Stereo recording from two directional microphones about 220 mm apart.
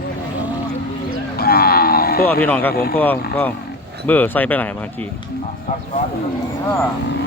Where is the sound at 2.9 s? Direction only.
10° left (ahead or behind).